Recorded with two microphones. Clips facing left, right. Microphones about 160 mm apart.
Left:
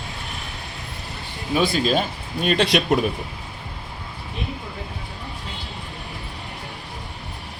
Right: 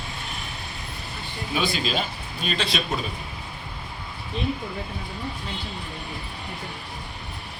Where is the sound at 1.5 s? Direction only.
50° left (ahead or behind); by 3.1 s 70° left (ahead or behind).